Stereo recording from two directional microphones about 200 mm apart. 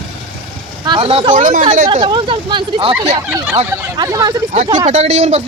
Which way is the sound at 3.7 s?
15° right (ahead or behind).